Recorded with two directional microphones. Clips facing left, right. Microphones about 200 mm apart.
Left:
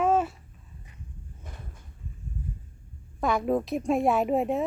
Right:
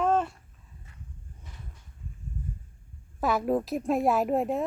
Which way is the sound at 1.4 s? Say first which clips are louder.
Left 4 dB; 50° left (ahead or behind).